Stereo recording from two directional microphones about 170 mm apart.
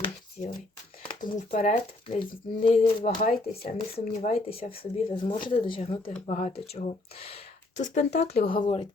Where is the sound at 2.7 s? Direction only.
35° left (ahead or behind).